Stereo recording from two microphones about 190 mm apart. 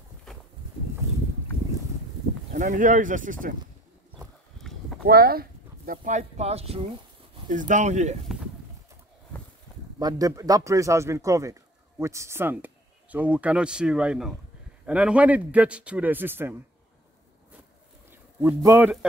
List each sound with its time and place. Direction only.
2.5 s speech: 45° right (ahead or behind)
4.2 s horse: centre (ahead or behind)
5.0 s speech: 55° right (ahead or behind); by 6.9 s 30° right (ahead or behind)
7.4 s speech: 45° right (ahead or behind)
9.9 s a man's voice: 20° right (ahead or behind)
18.1 s a man's voice: 15° right (ahead or behind)